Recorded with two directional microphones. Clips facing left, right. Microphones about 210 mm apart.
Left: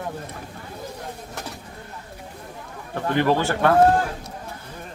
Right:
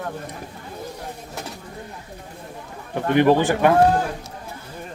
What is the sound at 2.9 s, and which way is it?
Speech, 15° right (ahead or behind).